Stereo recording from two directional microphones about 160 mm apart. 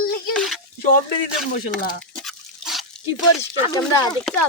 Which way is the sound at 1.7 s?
Centre (ahead or behind).